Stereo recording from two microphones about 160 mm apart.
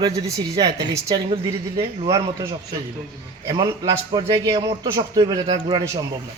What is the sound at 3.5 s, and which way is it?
A man's voice, 25° right (ahead or behind).